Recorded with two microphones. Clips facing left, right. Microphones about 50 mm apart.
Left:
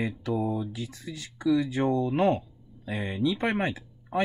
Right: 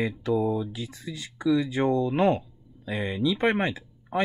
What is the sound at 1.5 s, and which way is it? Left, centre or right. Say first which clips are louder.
Speech: right 1 dB; right.